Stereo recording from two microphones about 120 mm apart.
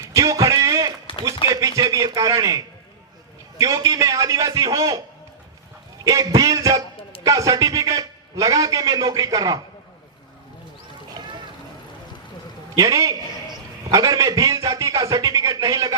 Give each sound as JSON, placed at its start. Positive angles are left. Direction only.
{"t": 0.0, "sound": "a sound", "side_deg": -25}
{"t": 1.5, "sound": "a man's voice", "side_deg": -30}
{"t": 6.1, "sound": "a man's voice", "side_deg": -30}
{"t": 12.7, "sound": "a man's voice", "side_deg": -30}